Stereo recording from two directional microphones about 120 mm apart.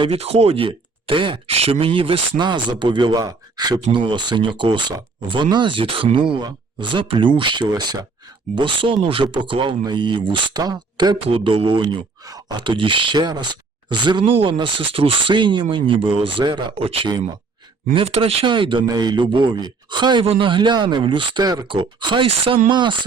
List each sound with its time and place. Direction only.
0.0 s speech: 55° right (ahead or behind); by 8.0 s 35° right (ahead or behind)
8.5 s speech: 45° right (ahead or behind)
11.3 s speech: 50° right (ahead or behind)
16.7 s speech: 55° right (ahead or behind); by 20.2 s 40° right (ahead or behind)
20.2 s speech: 50° right (ahead or behind)
22.7 s speech: 40° right (ahead or behind)